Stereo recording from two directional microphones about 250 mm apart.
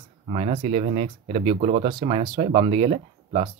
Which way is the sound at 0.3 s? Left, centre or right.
Right.